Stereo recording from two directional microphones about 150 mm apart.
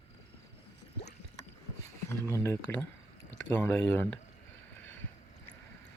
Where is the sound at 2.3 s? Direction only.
20° left (ahead or behind).